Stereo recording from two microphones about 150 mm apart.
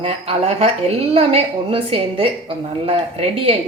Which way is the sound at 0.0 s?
40° right (ahead or behind).